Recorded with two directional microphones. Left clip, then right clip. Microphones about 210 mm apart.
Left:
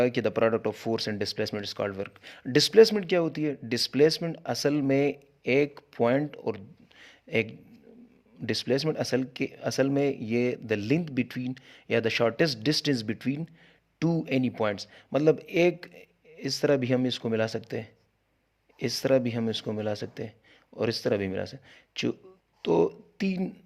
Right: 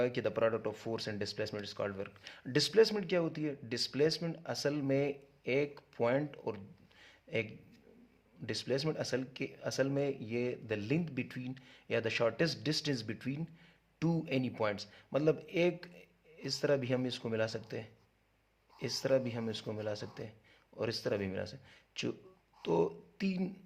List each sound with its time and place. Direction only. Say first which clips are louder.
0.0 s speech: left 8 dB; 40° left (ahead or behind)
7.0 s a sound: left 9 dB; 40° left (ahead or behind)
8.4 s speech: left 8 dB; 35° left (ahead or behind)